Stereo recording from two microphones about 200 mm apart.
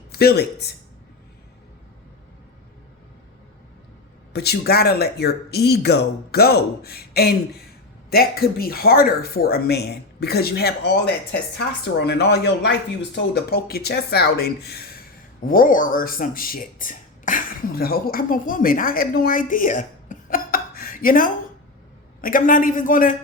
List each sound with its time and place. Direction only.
0.1 s speech: 50° left (ahead or behind)
4.3 s speech: 55° left (ahead or behind)